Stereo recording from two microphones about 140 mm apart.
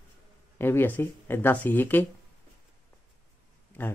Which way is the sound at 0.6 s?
15° left (ahead or behind).